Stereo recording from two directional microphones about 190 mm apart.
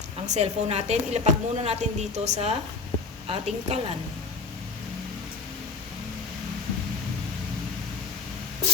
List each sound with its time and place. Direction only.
0.3 s a woman's voice: 35° right (ahead or behind)